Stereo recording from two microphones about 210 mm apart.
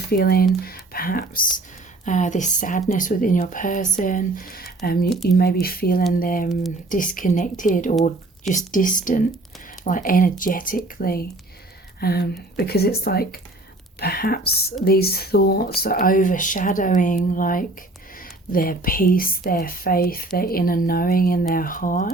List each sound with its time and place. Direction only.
0.1 s speech: 45° left (ahead or behind)